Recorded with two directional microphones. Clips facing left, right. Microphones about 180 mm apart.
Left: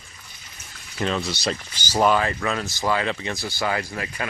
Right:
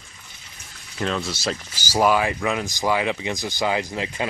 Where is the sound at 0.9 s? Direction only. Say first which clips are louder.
Even; centre (ahead or behind).